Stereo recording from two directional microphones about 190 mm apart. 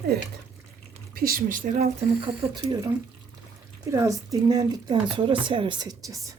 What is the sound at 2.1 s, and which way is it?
Speech, 30° right (ahead or behind).